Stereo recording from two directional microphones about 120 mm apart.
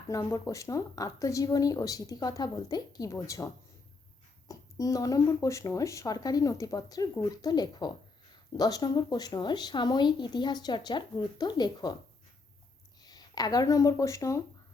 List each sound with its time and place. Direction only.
0.1 s a woman's voice: 30° left (ahead or behind)
13.0 s speech: 35° left (ahead or behind)